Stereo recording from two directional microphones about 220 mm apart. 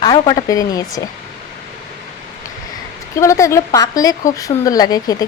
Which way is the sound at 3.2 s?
15° left (ahead or behind).